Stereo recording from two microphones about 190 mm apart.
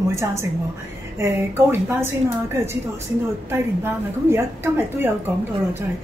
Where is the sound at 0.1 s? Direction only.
15° right (ahead or behind).